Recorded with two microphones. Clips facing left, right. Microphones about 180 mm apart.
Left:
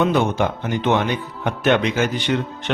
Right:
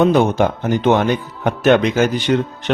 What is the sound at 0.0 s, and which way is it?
A man's voice, 40° right (ahead or behind).